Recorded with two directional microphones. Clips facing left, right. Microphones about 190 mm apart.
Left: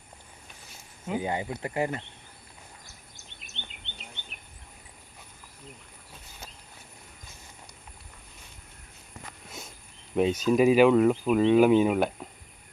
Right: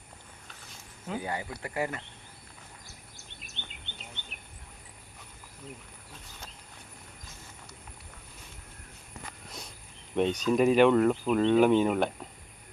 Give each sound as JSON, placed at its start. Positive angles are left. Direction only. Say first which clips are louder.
{"t": 1.0, "sound": "speech", "louder": "left 5 dB", "side_deg": 20}
{"t": 10.2, "sound": "speech", "louder": "left 3 dB", "side_deg": 5}